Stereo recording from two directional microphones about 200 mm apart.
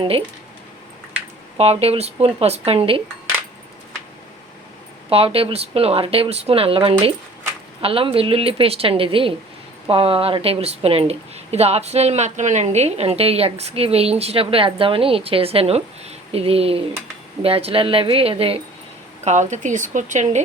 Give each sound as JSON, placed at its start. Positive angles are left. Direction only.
{"t": 1.5, "sound": "speech", "side_deg": -30}
{"t": 5.0, "sound": "speech", "side_deg": -30}